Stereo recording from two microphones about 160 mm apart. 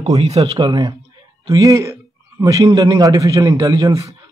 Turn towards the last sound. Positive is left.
turn(degrees=-20)  # may be behind; listen again after turning